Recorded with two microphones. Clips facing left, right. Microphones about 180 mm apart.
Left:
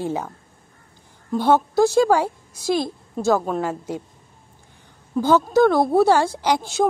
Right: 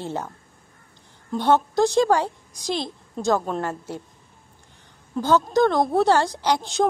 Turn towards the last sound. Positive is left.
turn(degrees=10)  # may be behind; listen again after turning